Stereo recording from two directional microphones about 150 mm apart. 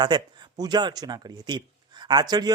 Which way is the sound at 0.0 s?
25° right (ahead or behind).